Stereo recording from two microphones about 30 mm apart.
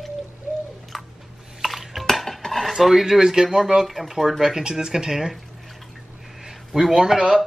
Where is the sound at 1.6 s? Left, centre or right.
Centre.